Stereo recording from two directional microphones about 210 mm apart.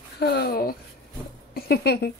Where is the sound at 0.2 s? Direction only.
50° left (ahead or behind).